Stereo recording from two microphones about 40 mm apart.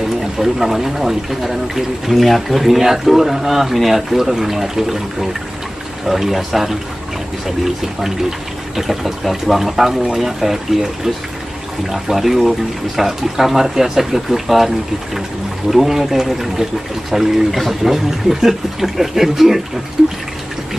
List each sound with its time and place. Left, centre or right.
0.2 s speech: centre
15.7 s speech: centre